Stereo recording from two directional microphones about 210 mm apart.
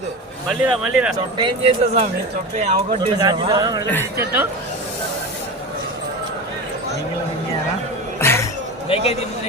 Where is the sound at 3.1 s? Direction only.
20° right (ahead or behind).